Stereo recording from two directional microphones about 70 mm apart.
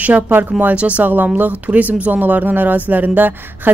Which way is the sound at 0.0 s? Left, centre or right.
Right.